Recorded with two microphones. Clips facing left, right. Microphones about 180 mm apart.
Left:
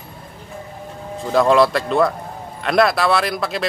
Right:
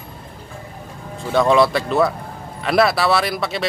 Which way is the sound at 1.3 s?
Centre (ahead or behind).